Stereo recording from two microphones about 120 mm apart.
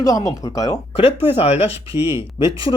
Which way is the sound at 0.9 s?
50° left (ahead or behind).